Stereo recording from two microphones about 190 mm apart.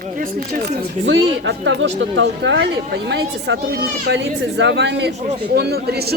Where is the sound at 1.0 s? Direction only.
70° right (ahead or behind).